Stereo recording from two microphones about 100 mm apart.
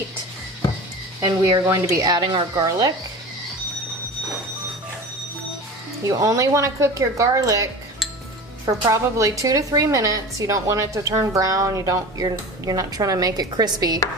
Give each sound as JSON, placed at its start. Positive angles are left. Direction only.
{"t": 1.2, "sound": "a woman's voice", "side_deg": -40}
{"t": 2.0, "sound": "a woman's voice", "side_deg": -45}
{"t": 6.1, "sound": "a woman's voice", "side_deg": -35}
{"t": 8.9, "sound": "a woman's voice", "side_deg": -35}